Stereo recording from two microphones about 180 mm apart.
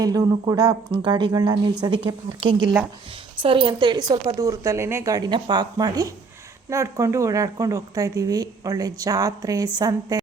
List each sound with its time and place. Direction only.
0.0 s a woman's voice: 20° right (ahead or behind)